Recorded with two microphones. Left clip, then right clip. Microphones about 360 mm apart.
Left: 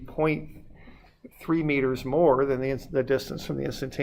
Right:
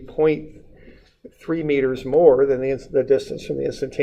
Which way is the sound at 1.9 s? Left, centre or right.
Left.